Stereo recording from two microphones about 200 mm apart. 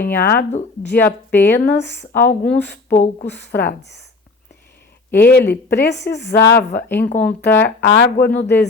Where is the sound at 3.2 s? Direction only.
55° left (ahead or behind).